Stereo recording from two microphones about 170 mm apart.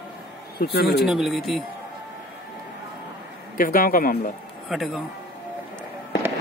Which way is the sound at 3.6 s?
55° left (ahead or behind).